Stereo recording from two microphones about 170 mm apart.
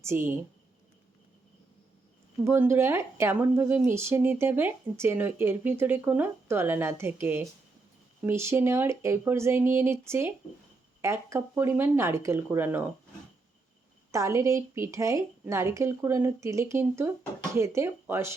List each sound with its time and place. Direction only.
0.0 s speech: 15° right (ahead or behind)
2.4 s speech: 15° right (ahead or behind)
14.1 s speech: 15° right (ahead or behind)